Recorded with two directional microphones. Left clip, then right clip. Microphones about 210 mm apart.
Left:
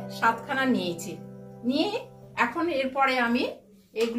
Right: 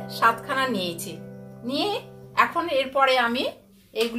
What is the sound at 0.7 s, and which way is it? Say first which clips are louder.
Speech: right 1 dB; 40° right (ahead or behind).